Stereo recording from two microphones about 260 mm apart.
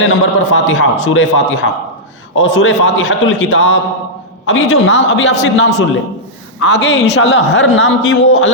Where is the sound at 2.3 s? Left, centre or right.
Left.